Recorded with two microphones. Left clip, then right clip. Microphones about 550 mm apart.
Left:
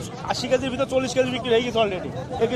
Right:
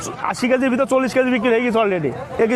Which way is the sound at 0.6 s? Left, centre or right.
Right.